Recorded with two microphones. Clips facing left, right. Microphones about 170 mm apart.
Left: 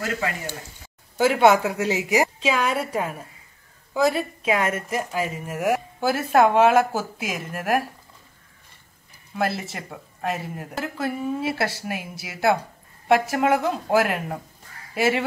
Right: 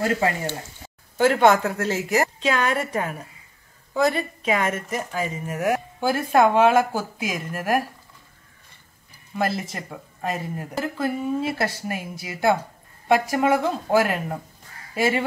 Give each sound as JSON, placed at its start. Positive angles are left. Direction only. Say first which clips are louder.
{"t": 1.1, "sound": "speech", "louder": "even", "side_deg": 5}
{"t": 9.4, "sound": "speech", "louder": "right 1 dB", "side_deg": 5}